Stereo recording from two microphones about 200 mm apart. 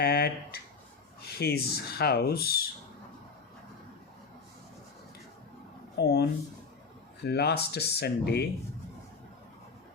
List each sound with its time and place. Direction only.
0.0 s a sound: 55° left (ahead or behind)
1.2 s speech: 50° left (ahead or behind)
6.0 s speech: 55° left (ahead or behind)